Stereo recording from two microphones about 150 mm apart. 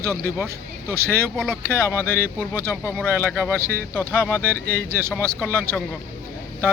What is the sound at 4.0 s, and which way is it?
Speech, 15° left (ahead or behind).